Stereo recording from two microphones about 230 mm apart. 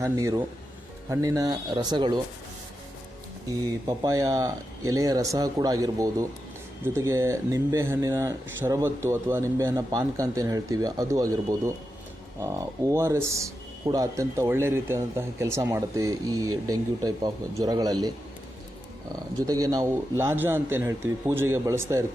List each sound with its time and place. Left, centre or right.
0.0 s speech: centre
3.6 s speech: centre
19.5 s speech: centre